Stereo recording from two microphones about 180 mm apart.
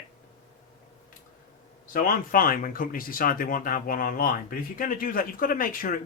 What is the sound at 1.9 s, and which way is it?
Speech, 50° left (ahead or behind).